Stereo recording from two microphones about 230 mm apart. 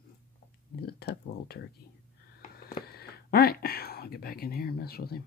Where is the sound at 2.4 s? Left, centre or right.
Left.